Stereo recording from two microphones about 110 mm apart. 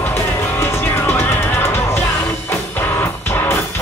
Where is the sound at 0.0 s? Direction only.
20° left (ahead or behind).